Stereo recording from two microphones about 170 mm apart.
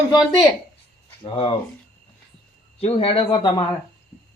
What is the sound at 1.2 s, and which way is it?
Speech, 35° left (ahead or behind).